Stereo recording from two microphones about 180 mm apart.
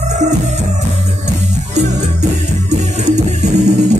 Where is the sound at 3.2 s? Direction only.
40° right (ahead or behind).